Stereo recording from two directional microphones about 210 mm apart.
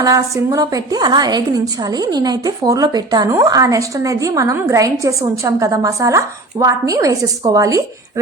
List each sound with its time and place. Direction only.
0.0 s a woman's voice: 15° right (ahead or behind)